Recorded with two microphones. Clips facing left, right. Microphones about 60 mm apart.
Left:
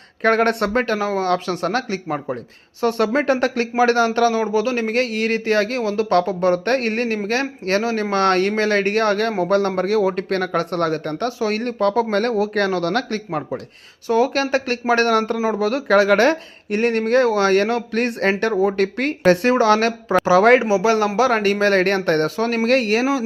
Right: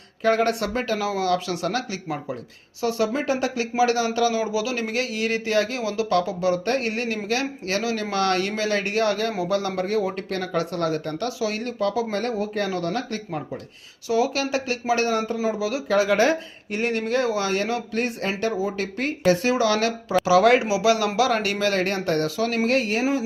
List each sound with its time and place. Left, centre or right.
0.2 s speech: left
2.8 s speech: left
12.1 s speech: left
14.1 s speech: left